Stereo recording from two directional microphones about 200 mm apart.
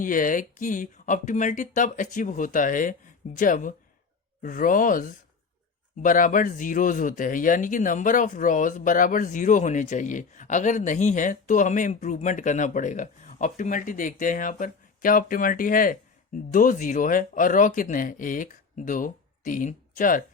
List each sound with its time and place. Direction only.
0.0 s speech: 40° left (ahead or behind)